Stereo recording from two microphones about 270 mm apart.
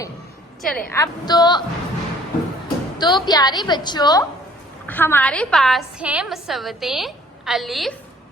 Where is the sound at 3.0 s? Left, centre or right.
Centre.